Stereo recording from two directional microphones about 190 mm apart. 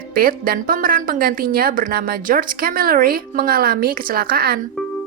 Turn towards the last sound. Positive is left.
turn(degrees=-55)  # may be behind; listen again after turning